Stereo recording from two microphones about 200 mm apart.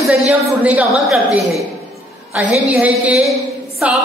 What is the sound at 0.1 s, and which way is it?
A woman's voice, 5° right (ahead or behind).